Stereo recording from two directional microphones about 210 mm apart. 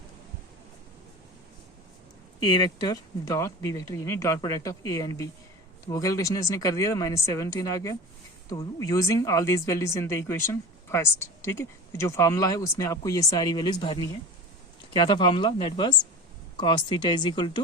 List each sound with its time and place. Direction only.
2.4 s speech: 20° left (ahead or behind)